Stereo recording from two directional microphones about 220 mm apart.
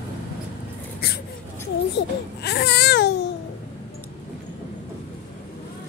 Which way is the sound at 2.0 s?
50° left (ahead or behind).